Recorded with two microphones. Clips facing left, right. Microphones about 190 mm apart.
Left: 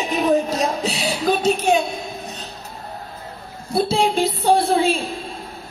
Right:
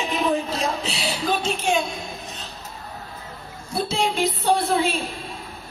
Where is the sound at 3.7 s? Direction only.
30° left (ahead or behind).